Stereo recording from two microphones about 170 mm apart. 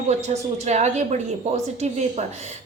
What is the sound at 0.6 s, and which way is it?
Speech, 40° right (ahead or behind).